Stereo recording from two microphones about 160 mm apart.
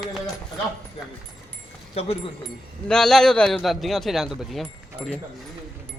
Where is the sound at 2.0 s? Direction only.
40° left (ahead or behind).